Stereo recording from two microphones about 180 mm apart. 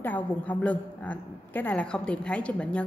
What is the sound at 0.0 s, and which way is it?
A woman's voice, 10° left (ahead or behind).